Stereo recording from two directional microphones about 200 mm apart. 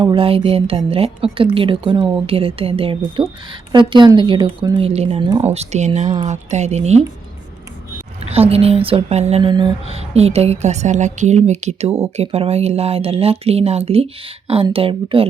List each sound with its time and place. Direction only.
0.0 s speech: 25° right (ahead or behind)
8.2 s speech: 30° right (ahead or behind)